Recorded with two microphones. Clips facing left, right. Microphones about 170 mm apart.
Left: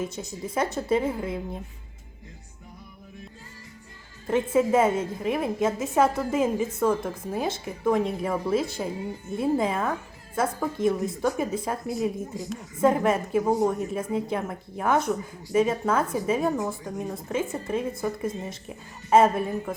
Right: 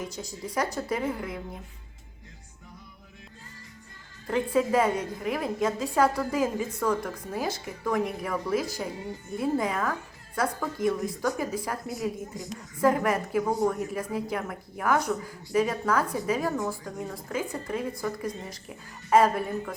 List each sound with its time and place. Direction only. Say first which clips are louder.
0.0 s a woman's voice: left 4 dB; 25° left (ahead or behind)
4.3 s a woman's voice: left 3 dB; 20° left (ahead or behind)